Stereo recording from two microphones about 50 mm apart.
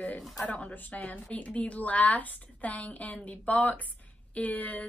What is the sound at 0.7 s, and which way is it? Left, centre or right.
A woman's voice, left.